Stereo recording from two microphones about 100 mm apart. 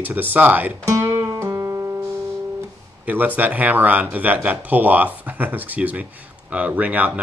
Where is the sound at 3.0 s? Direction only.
20° right (ahead or behind).